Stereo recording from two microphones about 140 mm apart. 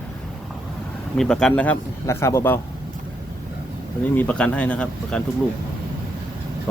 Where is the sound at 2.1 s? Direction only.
20° left (ahead or behind).